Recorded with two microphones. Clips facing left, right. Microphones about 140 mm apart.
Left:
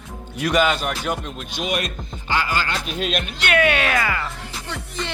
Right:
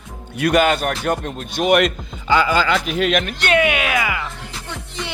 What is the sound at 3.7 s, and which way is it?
Speech, 10° right (ahead or behind).